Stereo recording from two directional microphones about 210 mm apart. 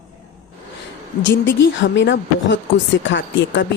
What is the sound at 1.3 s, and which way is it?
Speech, 60° left (ahead or behind).